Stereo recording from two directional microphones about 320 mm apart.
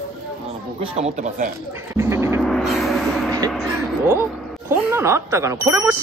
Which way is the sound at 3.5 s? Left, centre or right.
Centre.